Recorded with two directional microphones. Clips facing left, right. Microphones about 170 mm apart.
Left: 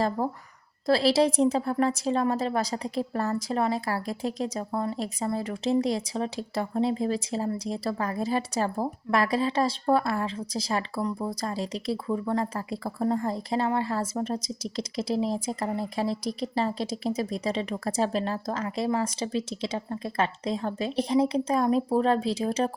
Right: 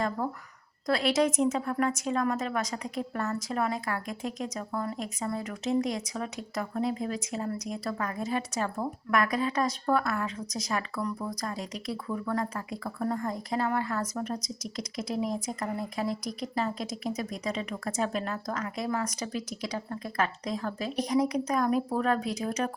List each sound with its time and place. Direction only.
0.2 s a woman's voice: 30° left (ahead or behind)